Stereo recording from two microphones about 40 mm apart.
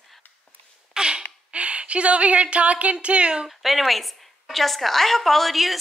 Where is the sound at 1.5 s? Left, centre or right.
Right.